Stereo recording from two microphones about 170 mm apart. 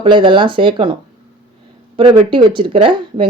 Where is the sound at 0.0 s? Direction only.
30° right (ahead or behind).